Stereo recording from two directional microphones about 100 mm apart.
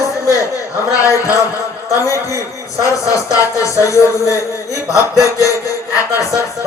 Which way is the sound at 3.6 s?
30° left (ahead or behind).